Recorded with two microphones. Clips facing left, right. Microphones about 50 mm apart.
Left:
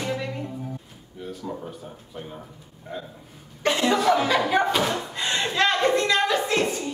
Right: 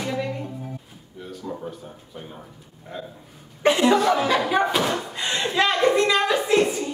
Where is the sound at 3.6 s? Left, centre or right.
Centre.